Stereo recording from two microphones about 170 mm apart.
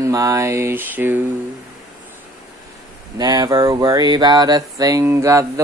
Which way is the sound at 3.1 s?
25° right (ahead or behind).